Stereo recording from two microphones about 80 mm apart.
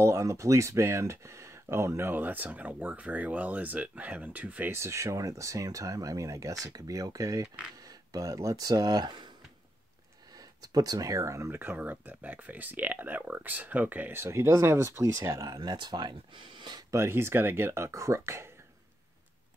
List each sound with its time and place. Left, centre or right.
0.0 s speech: right
4.7 s speech: right
10.6 s speech: right
11.5 s speech: right
16.9 s speech: right